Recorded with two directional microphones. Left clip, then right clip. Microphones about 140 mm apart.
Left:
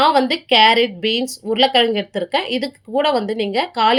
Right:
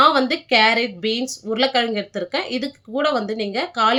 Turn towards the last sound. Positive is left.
turn(degrees=30)  # may be behind; listen again after turning